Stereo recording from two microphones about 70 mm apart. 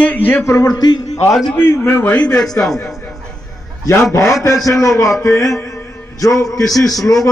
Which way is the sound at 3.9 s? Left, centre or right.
Left.